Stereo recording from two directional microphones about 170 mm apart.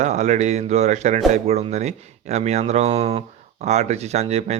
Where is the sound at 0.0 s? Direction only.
45° right (ahead or behind).